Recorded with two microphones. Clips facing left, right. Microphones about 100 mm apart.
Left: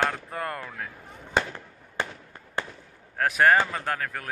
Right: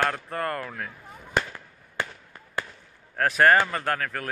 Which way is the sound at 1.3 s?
25° left (ahead or behind).